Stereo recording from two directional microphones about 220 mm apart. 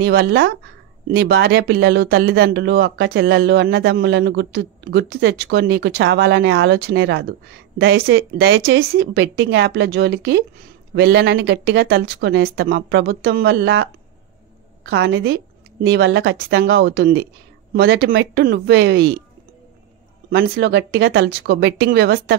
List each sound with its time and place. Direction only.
0.0 s a woman's voice: 50° right (ahead or behind)
20.2 s speech: 45° right (ahead or behind)